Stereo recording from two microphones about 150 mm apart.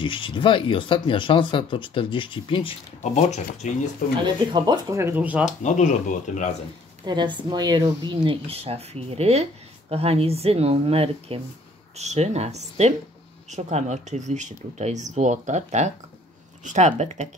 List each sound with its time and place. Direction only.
0.0 s speech: 35° left (ahead or behind)
3.0 s speech: 50° left (ahead or behind)
4.2 s speech: 30° right (ahead or behind); by 5.5 s 10° right (ahead or behind)
5.6 s speech: 55° left (ahead or behind)
7.0 s speech: 30° right (ahead or behind); by 17.3 s 50° right (ahead or behind)